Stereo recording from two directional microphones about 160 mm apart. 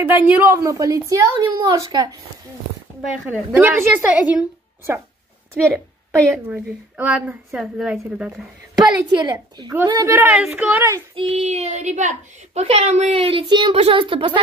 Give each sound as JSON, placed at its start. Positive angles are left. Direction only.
{"t": 0.0, "sound": "a woman's voice", "side_deg": -10}
{"t": 3.3, "sound": "speech", "side_deg": -10}
{"t": 6.5, "sound": "a woman's voice", "side_deg": -5}
{"t": 8.7, "sound": "a woman's voice", "side_deg": -25}
{"t": 10.1, "sound": "speech", "side_deg": -5}
{"t": 11.1, "sound": "a woman's voice", "side_deg": -35}